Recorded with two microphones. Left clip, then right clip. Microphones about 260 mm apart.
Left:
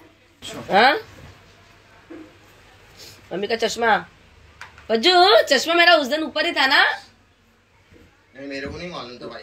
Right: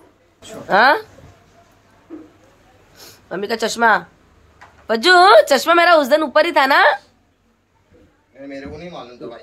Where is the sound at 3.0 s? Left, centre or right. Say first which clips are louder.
Right 2 dB; centre.